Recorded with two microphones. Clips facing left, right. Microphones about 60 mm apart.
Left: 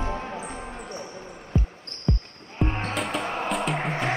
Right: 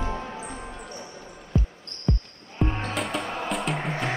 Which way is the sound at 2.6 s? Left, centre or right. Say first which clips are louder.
Even; centre.